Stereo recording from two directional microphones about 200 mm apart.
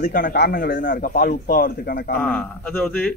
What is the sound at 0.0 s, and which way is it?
A man's voice, 45° left (ahead or behind).